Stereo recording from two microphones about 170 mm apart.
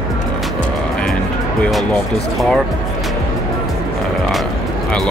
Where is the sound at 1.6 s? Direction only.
Centre (ahead or behind).